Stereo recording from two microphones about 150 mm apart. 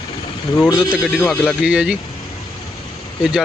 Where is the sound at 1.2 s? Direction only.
10° left (ahead or behind).